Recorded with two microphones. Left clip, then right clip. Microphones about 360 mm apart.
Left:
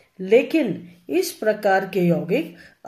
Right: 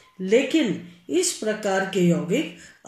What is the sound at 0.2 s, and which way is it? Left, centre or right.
Speech, left.